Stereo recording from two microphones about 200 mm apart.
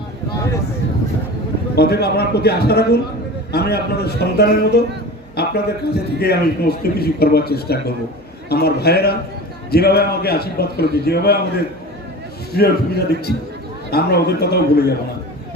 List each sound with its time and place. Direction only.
1.7 s a man's voice: 55° left (ahead or behind)